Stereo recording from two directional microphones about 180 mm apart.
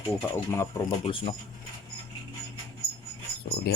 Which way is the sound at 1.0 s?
30° left (ahead or behind).